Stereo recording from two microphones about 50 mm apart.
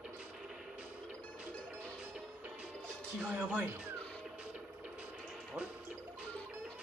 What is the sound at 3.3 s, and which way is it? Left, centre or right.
Speech, right.